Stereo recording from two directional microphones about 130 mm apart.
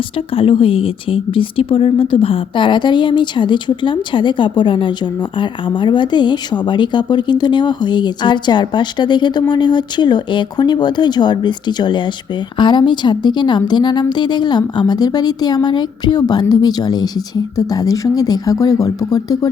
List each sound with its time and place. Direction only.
0.3 s speech: 45° left (ahead or behind); by 19.5 s 30° left (ahead or behind)